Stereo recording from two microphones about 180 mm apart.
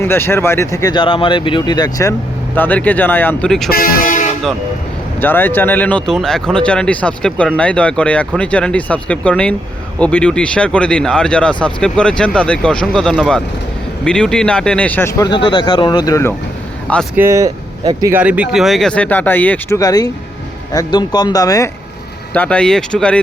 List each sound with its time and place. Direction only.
0.0 s speech: 15° left (ahead or behind)
2.6 s speech: 10° left (ahead or behind)
3.7 s speech: 50° left (ahead or behind)
5.2 s speech: 10° left (ahead or behind)
15.2 s speech: 25° left (ahead or behind)
17.2 s speech: 15° right (ahead or behind)
18.2 s speech: 5° right (ahead or behind); by 19.8 s 10° left (ahead or behind)
19.8 s speech: 20° left (ahead or behind)
22.3 s speech: 5° left (ahead or behind)